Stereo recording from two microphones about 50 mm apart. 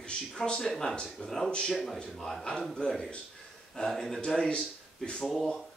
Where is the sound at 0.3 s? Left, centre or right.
Centre.